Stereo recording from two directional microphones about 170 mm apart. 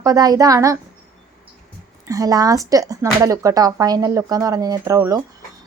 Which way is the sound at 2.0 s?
20° right (ahead or behind).